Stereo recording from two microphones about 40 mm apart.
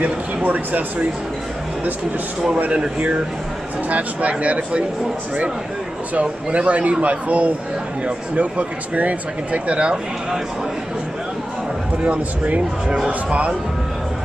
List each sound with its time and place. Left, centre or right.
0.0 s speech: right
3.9 s speech: right
6.1 s speech: right
12.0 s speech: right
12.8 s speech: centre
13.3 s speech: right